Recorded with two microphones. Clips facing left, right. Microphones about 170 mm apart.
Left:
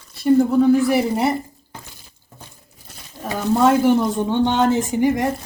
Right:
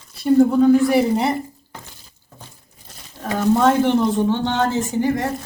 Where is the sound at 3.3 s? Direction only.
5° left (ahead or behind).